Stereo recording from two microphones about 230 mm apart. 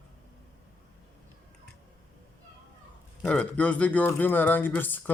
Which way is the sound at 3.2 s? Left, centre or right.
Centre.